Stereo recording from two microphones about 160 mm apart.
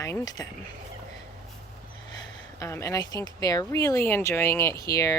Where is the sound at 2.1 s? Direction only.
20° left (ahead or behind).